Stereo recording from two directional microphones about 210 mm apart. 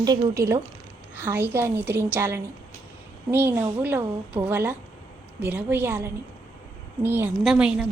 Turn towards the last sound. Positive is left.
turn(degrees=-5)  # may be behind; listen again after turning